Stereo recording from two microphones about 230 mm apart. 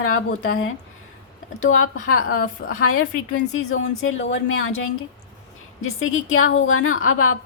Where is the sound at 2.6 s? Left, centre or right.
Left.